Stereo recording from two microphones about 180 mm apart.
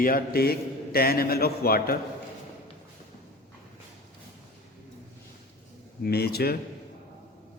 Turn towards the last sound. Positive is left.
turn(degrees=60)  # may be behind; listen again after turning